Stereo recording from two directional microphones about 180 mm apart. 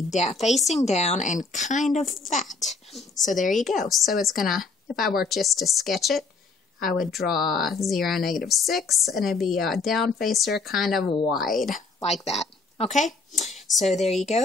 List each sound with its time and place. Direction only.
0.1 s speech: 40° left (ahead or behind)
2.5 s speech: centre (ahead or behind)
3.3 s speech: 45° left (ahead or behind)
3.9 s speech: centre (ahead or behind)
12.0 s speech: 35° left (ahead or behind)